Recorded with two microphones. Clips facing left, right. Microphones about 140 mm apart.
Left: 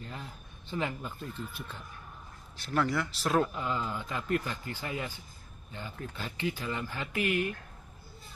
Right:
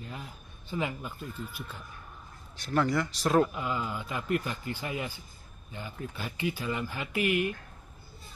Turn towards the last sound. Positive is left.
turn(degrees=-15)  # may be behind; listen again after turning